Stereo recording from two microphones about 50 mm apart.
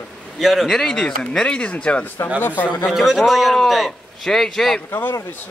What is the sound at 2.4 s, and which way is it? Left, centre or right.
Speech, left.